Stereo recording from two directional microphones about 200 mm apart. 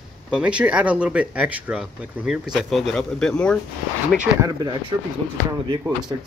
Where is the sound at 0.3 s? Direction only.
5° right (ahead or behind).